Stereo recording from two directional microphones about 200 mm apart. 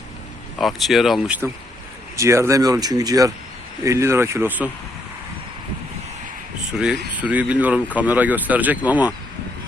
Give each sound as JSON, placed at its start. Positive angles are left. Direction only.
{"t": 0.6, "sound": "speech", "side_deg": 0}
{"t": 6.7, "sound": "speech", "side_deg": 0}